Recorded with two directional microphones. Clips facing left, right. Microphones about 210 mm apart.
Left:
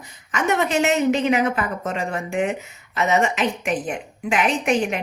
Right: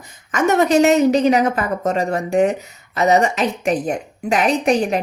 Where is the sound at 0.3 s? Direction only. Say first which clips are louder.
Right 6 dB; 45° right (ahead or behind).